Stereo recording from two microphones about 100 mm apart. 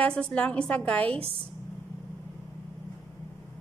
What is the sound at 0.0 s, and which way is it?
A woman's voice, 10° left (ahead or behind).